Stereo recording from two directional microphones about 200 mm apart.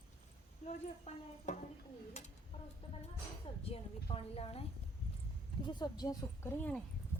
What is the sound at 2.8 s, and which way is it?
A woman's voice, 30° left (ahead or behind).